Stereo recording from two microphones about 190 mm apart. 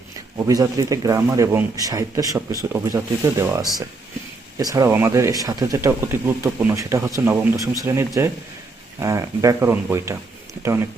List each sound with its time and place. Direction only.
0.3 s speech: 15° right (ahead or behind)